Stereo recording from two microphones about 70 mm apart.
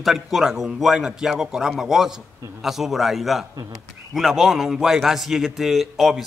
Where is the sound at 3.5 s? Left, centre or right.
Right.